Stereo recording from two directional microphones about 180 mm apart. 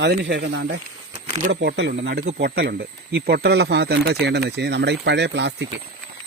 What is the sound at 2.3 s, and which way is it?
Speech, 65° right (ahead or behind).